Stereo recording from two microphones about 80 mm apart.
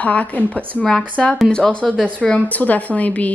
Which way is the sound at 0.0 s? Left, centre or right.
Centre.